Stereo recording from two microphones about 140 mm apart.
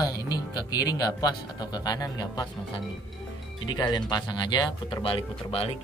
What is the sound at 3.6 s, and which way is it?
Speech, 30° left (ahead or behind).